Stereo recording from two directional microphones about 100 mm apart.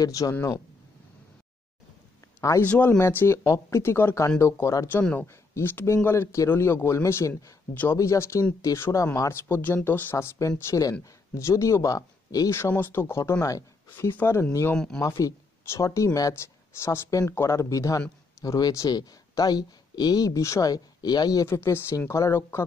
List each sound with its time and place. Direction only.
0.0 s speech: 35° left (ahead or behind)
2.7 s speech: 10° left (ahead or behind)
3.0 s a man's voice: 25° left (ahead or behind)
5.0 s a man's voice: 15° left (ahead or behind)
7.7 s speech: 15° left (ahead or behind)
8.0 s a man's voice: 30° left (ahead or behind)
10.7 s speech: 35° left (ahead or behind)
12.4 s a man's voice: 25° left (ahead or behind)
13.8 s a man's voice: 20° left (ahead or behind); by 21.5 s 40° left (ahead or behind)
21.5 s a man's voice: 25° left (ahead or behind)